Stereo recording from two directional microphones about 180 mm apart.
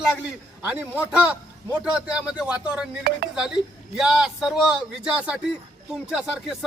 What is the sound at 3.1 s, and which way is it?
Speech, 60° right (ahead or behind).